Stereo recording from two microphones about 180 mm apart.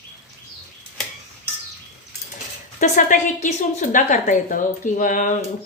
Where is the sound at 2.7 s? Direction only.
45° left (ahead or behind).